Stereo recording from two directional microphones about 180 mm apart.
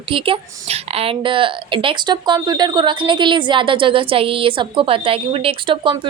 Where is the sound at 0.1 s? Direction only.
30° right (ahead or behind).